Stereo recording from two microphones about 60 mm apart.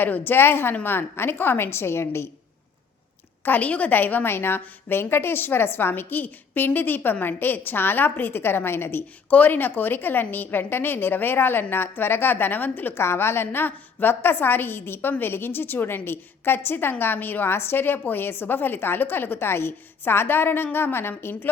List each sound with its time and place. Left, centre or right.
0.0 s a woman's voice: left
3.4 s a woman's voice: left
12.9 s a woman's voice: left